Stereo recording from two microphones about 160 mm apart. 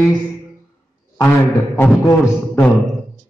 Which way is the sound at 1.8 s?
15° left (ahead or behind).